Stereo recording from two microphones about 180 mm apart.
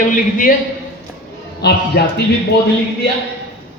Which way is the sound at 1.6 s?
65° left (ahead or behind).